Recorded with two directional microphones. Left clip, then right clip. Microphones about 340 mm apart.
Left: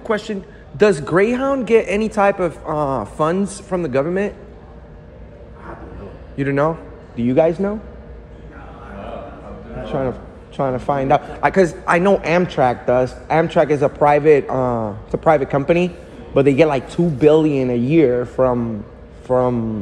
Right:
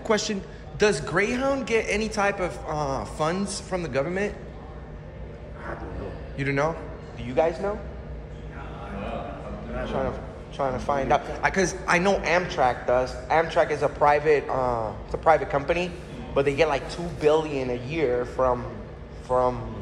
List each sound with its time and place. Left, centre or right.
0.0 s a man's voice: centre
6.3 s a man's voice: centre
9.8 s a man's voice: centre
18.2 s a man's voice: left